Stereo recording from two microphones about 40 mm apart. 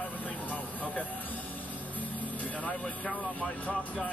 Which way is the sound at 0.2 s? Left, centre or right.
Left.